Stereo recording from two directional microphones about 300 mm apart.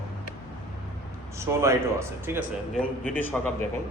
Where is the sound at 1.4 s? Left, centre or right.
Centre.